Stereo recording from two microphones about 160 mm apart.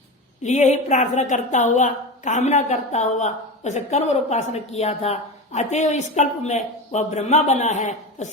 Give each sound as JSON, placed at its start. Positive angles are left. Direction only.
{"t": 0.4, "sound": "a woman's voice", "side_deg": 45}